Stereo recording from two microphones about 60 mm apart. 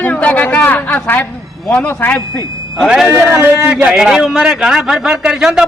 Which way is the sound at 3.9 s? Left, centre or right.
Centre.